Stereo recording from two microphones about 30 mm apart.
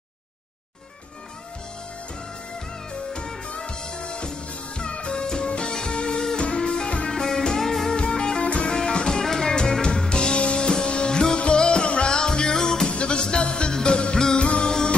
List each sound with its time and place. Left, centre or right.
3.4 s music: left
12.1 s music: left
12.9 s music: left